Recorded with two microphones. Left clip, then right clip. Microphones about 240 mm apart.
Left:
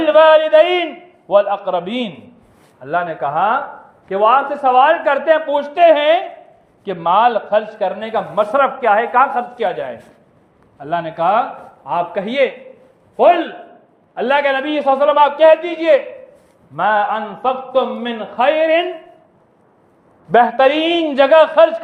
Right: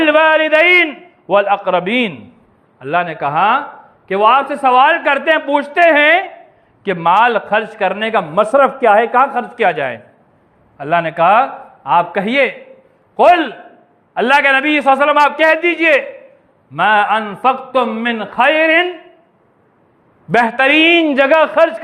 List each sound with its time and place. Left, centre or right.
0.0 s a sound: right
1.3 s a man's voice: right
20.3 s a man's voice: right